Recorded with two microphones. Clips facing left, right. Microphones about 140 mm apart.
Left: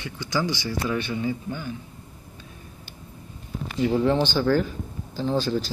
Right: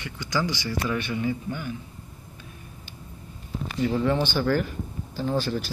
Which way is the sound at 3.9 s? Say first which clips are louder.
Left 3 dB; 20° left (ahead or behind).